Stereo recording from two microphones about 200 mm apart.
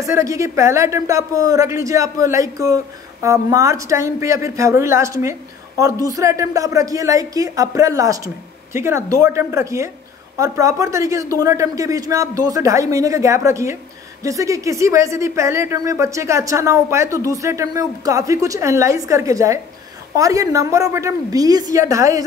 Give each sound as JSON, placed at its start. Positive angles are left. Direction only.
{"t": 0.0, "sound": "speech", "side_deg": -15}